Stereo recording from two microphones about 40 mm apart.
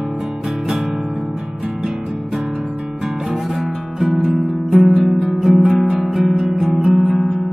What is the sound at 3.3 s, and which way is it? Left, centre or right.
Music, centre.